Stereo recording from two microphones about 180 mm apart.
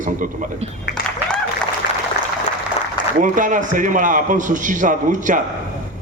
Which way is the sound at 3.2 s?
45° right (ahead or behind).